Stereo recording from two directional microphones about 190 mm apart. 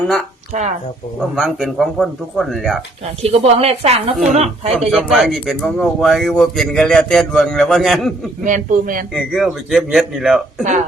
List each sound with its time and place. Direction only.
1.4 s a man's voice: centre (ahead or behind)
3.2 s speech: 35° right (ahead or behind)
4.9 s a man's voice: centre (ahead or behind)
8.4 s a man's voice: 45° right (ahead or behind)
9.1 s a man's voice: centre (ahead or behind)
10.6 s speech: 40° right (ahead or behind)